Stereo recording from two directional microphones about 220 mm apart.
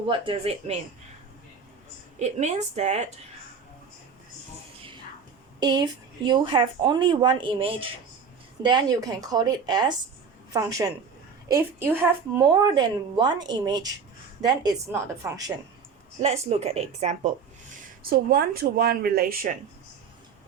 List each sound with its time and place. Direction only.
0.1 s speech: 25° right (ahead or behind)
2.1 s a woman's voice: 30° right (ahead or behind)
5.5 s a woman's voice: 20° right (ahead or behind)
16.2 s speech: 30° right (ahead or behind)
18.1 s speech: 40° right (ahead or behind)